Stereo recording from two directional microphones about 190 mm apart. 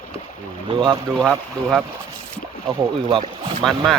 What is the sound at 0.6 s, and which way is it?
Speech, 25° right (ahead or behind).